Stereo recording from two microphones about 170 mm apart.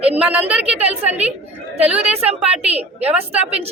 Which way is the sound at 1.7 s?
35° right (ahead or behind).